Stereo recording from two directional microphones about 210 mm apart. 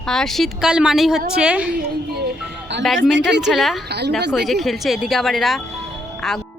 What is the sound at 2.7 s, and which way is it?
Speech, 55° right (ahead or behind).